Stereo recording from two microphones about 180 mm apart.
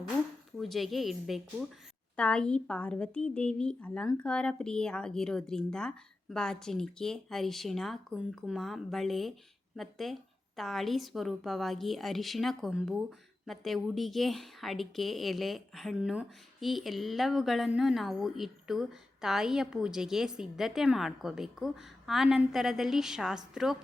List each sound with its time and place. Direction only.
0.6 s a woman's voice: centre (ahead or behind)